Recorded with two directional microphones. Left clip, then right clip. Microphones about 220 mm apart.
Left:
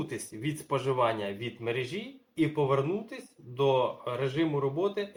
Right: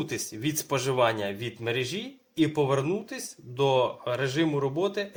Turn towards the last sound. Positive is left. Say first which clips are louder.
# right 2 dB
turn(degrees=-45)  # may be behind; listen again after turning